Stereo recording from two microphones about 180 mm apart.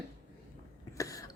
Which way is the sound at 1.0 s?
20° left (ahead or behind).